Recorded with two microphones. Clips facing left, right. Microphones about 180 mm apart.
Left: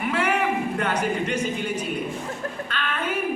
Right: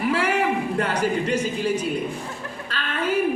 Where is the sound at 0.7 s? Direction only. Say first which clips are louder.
Right 2 dB; 35° right (ahead or behind).